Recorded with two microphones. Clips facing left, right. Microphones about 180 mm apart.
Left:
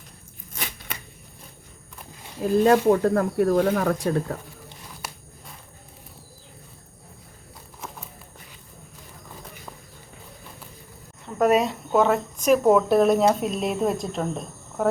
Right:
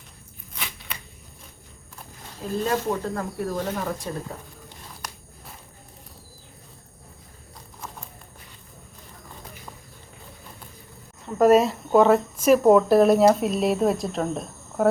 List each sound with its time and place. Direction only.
0.5 s a sound: 45° left (ahead or behind)
2.6 s speech: 60° left (ahead or behind)
5.0 s walk: 5° left (ahead or behind)
11.3 s speech: centre (ahead or behind)